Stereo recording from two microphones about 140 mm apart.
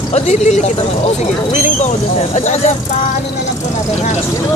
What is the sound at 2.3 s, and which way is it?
Speech, 55° left (ahead or behind).